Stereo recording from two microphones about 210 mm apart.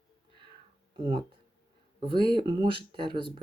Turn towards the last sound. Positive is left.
turn(degrees=-25)  # may be behind; listen again after turning